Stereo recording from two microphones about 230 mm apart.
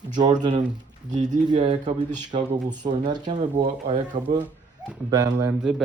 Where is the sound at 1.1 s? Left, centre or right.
Right.